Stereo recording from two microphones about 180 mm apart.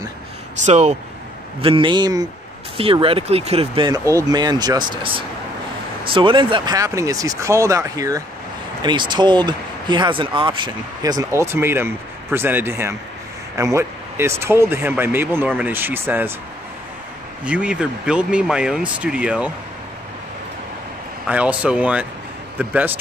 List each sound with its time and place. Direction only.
0.7 s speech: 40° right (ahead or behind)
1.6 s speech: 30° right (ahead or behind); by 16.3 s 10° right (ahead or behind)
17.5 s speech: 5° right (ahead or behind)
21.3 s speech: 5° right (ahead or behind)